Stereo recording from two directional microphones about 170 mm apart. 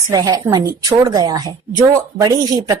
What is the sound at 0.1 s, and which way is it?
Speech, 20° right (ahead or behind).